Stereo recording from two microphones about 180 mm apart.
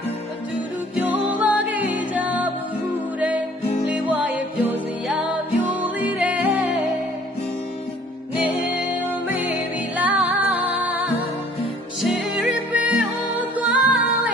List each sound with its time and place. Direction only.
0.9 s music: 10° right (ahead or behind)
9.9 s music: 10° right (ahead or behind)
12.0 s music: centre (ahead or behind)